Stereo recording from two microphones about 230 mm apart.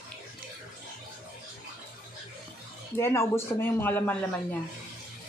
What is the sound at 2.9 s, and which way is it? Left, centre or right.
A man's voice, centre.